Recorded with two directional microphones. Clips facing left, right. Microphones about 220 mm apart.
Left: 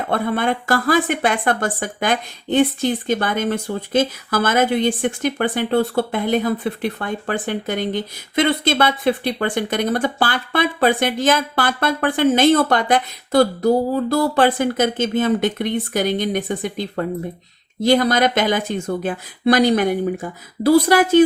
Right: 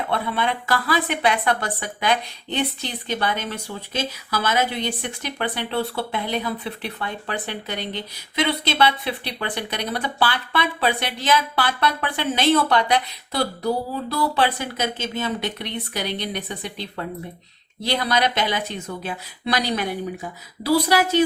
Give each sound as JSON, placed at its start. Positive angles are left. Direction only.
{"t": 0.1, "sound": "a woman's voice", "side_deg": 45}